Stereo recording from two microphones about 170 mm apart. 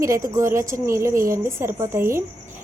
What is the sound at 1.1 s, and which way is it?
Speech, 55° right (ahead or behind).